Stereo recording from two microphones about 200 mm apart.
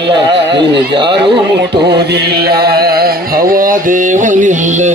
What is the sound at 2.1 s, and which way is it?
Music, 55° right (ahead or behind).